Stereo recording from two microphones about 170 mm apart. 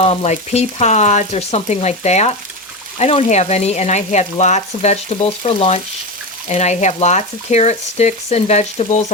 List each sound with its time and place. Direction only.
0.0 s speech: 40° left (ahead or behind)